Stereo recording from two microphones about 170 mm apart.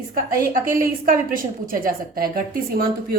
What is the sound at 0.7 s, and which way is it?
Speech, 55° right (ahead or behind).